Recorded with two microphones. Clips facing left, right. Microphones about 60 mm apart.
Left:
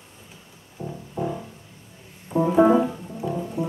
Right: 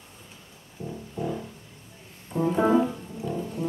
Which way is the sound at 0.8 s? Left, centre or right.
Left.